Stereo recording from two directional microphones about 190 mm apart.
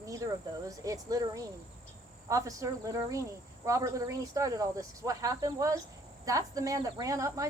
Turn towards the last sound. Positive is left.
turn(degrees=-15)  # may be behind; listen again after turning